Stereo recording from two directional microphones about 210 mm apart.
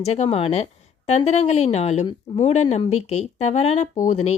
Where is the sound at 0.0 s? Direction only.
30° left (ahead or behind).